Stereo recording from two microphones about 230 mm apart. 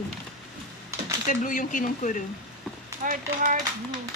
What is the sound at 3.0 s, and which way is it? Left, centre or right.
Speech, right.